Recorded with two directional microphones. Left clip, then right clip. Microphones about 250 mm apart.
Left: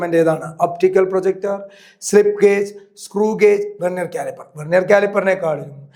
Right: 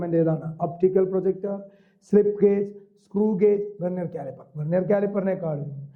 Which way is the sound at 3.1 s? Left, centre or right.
Centre.